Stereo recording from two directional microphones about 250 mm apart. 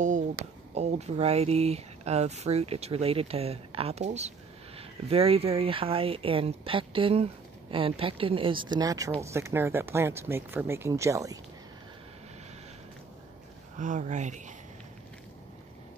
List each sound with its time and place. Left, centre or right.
0.7 s speech: right
13.7 s speech: right